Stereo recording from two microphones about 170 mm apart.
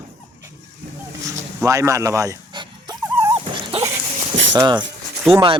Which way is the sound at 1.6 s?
20° right (ahead or behind).